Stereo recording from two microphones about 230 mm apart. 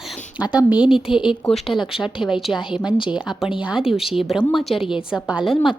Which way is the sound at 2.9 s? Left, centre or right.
Left.